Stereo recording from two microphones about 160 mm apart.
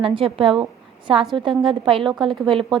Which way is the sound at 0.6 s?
30° right (ahead or behind).